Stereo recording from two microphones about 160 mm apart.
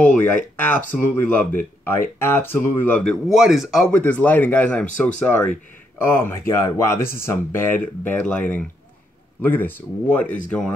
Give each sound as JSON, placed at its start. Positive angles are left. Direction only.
{"t": 0.0, "sound": "speech", "side_deg": 10}
{"t": 3.3, "sound": "speech", "side_deg": 0}
{"t": 3.9, "sound": "speech", "side_deg": 10}
{"t": 10.2, "sound": "speech", "side_deg": 55}